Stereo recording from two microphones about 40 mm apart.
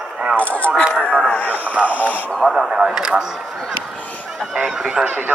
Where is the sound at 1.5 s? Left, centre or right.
Right.